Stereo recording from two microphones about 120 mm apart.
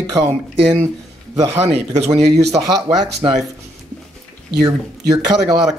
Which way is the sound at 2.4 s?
30° right (ahead or behind).